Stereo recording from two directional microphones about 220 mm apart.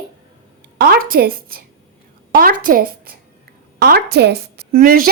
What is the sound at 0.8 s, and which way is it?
A child's voice, 45° right (ahead or behind).